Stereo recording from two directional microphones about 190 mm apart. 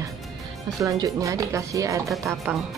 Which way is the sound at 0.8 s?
15° right (ahead or behind).